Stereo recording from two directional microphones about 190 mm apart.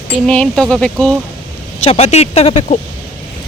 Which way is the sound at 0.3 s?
5° left (ahead or behind).